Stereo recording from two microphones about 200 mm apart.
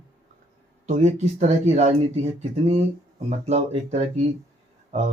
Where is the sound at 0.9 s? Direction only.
35° right (ahead or behind).